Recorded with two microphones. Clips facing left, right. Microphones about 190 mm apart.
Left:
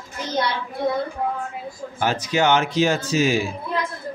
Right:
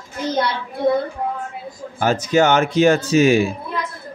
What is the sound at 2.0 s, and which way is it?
A man's voice, 45° right (ahead or behind).